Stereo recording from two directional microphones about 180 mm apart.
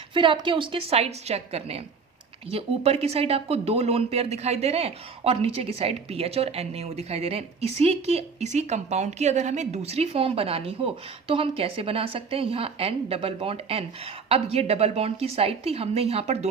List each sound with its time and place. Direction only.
0.1 s speech: 25° right (ahead or behind)